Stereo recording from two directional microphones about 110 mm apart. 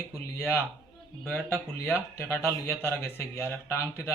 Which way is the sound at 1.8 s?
20° left (ahead or behind).